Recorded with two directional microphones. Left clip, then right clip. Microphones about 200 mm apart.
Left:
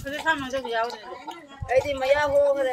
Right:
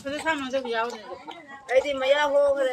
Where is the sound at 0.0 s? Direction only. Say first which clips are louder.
Left 2 dB; 25° right (ahead or behind).